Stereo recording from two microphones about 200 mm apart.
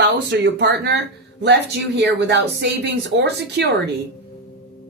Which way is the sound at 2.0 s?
55° right (ahead or behind).